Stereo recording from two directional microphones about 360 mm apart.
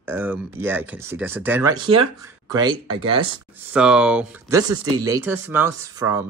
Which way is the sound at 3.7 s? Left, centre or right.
Centre.